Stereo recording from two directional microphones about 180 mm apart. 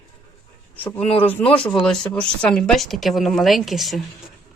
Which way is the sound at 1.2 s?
10° left (ahead or behind).